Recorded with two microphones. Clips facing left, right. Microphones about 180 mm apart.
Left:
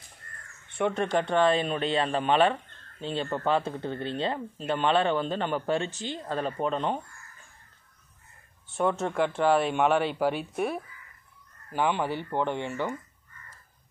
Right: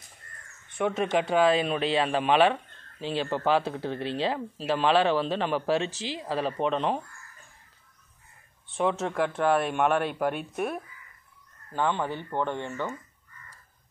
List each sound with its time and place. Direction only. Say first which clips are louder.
0.7 s speech: even; centre (ahead or behind)
8.6 s speech: even; centre (ahead or behind)
11.7 s speech: left 1 dB; 15° left (ahead or behind)